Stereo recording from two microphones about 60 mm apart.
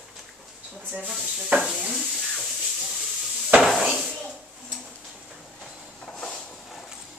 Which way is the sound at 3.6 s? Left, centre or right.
Centre.